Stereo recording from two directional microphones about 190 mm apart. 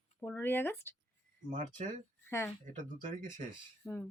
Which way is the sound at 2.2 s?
10° left (ahead or behind).